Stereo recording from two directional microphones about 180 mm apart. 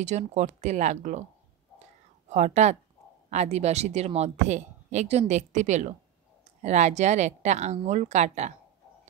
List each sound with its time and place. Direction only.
0.0 s speech: 40° right (ahead or behind)
2.2 s speech: 40° right (ahead or behind)